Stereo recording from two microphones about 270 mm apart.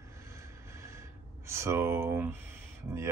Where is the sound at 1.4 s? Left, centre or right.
Centre.